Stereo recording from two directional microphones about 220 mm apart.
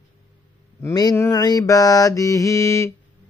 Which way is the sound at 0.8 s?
15° left (ahead or behind).